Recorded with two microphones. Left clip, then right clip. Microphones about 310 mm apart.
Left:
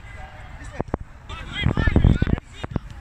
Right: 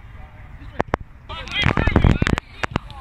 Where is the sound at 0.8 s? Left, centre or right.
Right.